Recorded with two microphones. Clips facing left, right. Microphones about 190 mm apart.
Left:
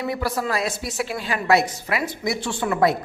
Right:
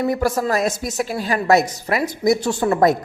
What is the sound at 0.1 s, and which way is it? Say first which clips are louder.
A woman's voice: right 5 dB; 45° right (ahead or behind).